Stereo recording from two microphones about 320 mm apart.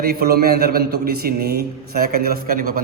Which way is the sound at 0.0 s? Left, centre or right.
Right.